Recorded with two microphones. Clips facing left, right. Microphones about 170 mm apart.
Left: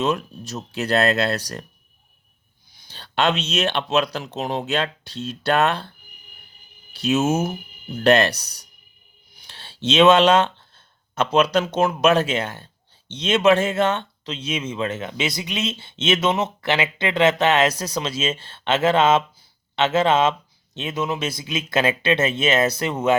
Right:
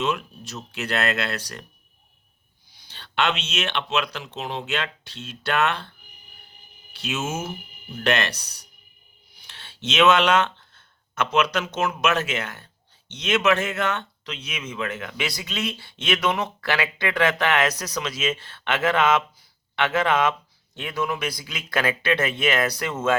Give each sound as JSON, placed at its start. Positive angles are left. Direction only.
{"t": 0.0, "sound": "speech", "side_deg": 40}
{"t": 2.8, "sound": "speech", "side_deg": 40}
{"t": 6.9, "sound": "speech", "side_deg": 40}